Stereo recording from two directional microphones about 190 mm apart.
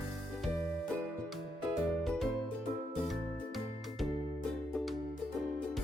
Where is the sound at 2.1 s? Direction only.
Centre (ahead or behind).